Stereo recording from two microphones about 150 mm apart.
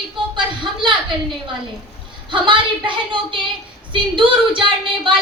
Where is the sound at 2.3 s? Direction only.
35° right (ahead or behind).